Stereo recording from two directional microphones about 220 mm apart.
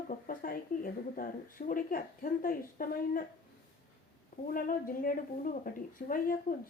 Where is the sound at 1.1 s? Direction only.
35° left (ahead or behind).